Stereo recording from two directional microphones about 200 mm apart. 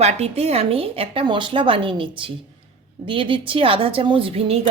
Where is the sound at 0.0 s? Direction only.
30° right (ahead or behind).